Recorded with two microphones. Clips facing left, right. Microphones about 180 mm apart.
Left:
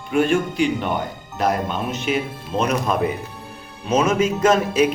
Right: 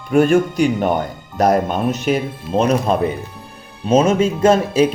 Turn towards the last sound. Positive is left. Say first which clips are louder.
# right 3 dB
turn(degrees=-30)  # may be behind; listen again after turning